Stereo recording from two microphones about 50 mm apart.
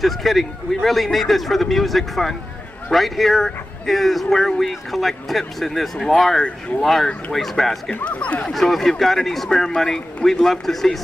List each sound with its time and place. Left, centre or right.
0.0 s speech: centre
7.9 s speech: left
8.5 s speech: centre